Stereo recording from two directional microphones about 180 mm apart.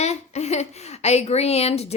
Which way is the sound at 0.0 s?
40° left (ahead or behind).